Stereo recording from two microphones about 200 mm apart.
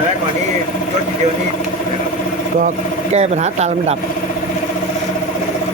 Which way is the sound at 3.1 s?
35° right (ahead or behind).